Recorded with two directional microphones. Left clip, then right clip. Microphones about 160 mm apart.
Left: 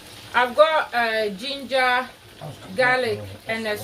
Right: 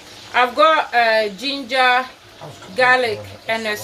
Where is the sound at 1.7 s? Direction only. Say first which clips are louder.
Right 5 dB; 45° right (ahead or behind).